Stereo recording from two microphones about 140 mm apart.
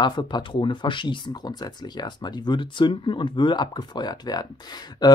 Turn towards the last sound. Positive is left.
turn(degrees=30)  # may be behind; listen again after turning